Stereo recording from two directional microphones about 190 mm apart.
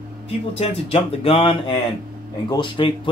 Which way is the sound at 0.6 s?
30° left (ahead or behind).